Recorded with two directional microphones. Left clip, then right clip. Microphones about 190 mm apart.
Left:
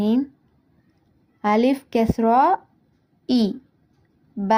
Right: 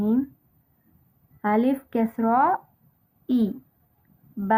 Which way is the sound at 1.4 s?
15° left (ahead or behind).